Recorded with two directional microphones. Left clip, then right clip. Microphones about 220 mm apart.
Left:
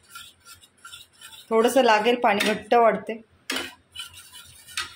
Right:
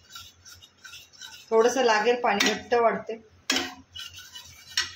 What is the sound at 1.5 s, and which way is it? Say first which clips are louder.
Speech: left 2 dB; 35° left (ahead or behind).